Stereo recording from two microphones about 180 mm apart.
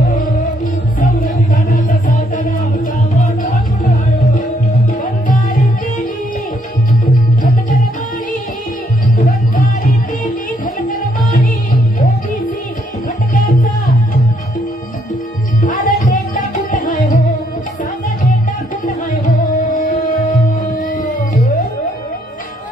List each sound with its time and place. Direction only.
1.7 s music: 50° left (ahead or behind)
10.9 s music: 50° left (ahead or behind)
13.3 s music: 50° left (ahead or behind)
15.6 s music: 50° left (ahead or behind)
19.2 s music: 45° left (ahead or behind)